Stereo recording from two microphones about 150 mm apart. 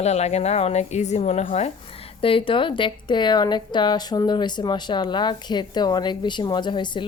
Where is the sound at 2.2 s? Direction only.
35° left (ahead or behind).